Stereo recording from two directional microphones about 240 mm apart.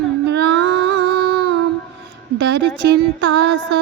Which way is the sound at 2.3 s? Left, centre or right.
Right.